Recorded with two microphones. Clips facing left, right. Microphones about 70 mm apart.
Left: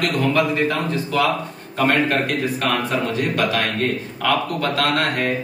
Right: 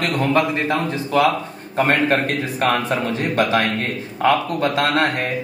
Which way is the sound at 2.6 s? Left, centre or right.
Right.